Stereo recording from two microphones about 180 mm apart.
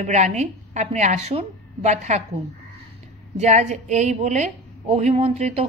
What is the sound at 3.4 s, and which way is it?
Speech, 40° right (ahead or behind).